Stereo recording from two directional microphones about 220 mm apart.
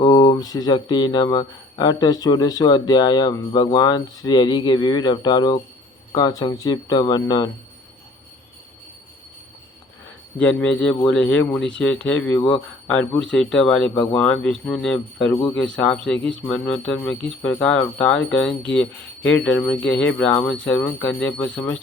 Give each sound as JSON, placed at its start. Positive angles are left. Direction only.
{"t": 0.0, "sound": "speech", "side_deg": 20}
{"t": 10.3, "sound": "speech", "side_deg": 5}
{"t": 12.4, "sound": "speech", "side_deg": 25}
{"t": 12.9, "sound": "speech", "side_deg": 5}